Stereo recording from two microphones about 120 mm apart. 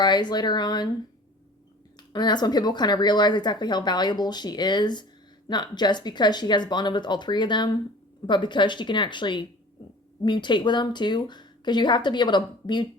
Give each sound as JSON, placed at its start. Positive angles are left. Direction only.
{"t": 0.0, "sound": "a woman's voice", "side_deg": 35}
{"t": 2.1, "sound": "a woman's voice", "side_deg": 35}